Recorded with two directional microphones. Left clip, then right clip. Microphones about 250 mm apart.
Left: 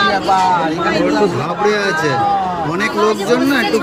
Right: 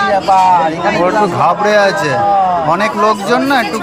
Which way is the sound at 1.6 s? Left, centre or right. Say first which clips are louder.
Right 4 dB; centre.